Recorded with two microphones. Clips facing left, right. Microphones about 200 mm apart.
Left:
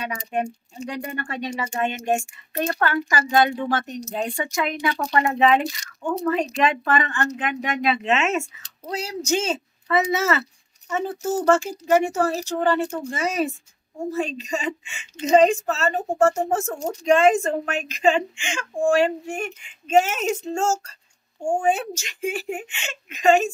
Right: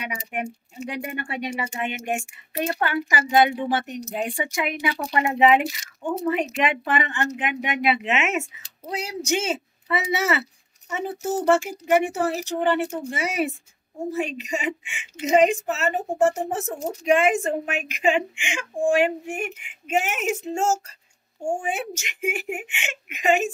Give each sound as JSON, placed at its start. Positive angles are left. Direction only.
{"t": 0.8, "sound": "a woman's voice", "side_deg": -15}
{"t": 10.1, "sound": "speech", "side_deg": -15}